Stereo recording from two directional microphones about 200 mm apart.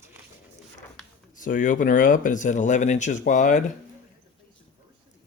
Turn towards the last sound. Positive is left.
turn(degrees=40)  # may be behind; listen again after turning